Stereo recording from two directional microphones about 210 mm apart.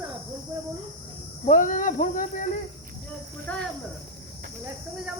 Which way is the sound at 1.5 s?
40° left (ahead or behind).